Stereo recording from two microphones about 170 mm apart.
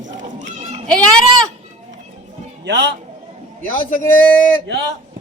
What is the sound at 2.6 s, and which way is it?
Speech, 90° right.